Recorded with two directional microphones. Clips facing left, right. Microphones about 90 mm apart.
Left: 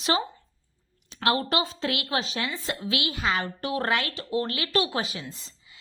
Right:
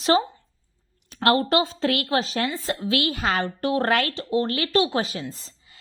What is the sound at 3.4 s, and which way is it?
A woman's voice, 35° right (ahead or behind).